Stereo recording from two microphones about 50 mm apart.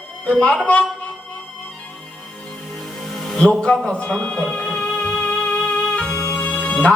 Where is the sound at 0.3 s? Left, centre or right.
Centre.